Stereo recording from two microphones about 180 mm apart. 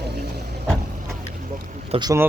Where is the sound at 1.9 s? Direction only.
35° right (ahead or behind).